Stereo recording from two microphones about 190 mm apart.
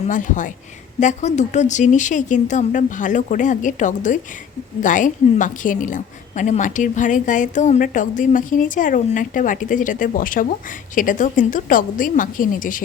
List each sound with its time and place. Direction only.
0.1 s a woman's voice: 40° left (ahead or behind)